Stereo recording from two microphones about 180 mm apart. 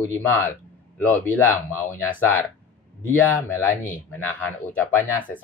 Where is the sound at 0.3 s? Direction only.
10° left (ahead or behind).